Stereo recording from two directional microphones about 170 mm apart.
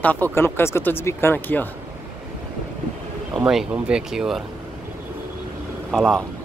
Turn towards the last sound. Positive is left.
turn(degrees=0)  # may be behind; listen again after turning